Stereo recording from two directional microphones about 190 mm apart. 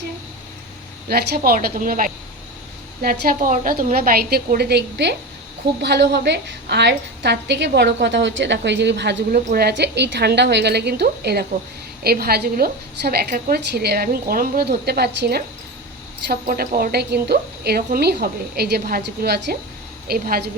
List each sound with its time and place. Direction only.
1.0 s a woman's voice: 55° right (ahead or behind)